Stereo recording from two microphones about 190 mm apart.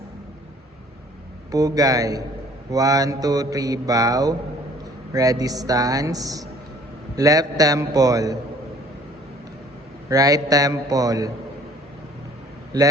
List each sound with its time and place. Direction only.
1.5 s speech: 20° right (ahead or behind)
10.1 s speech: 20° right (ahead or behind)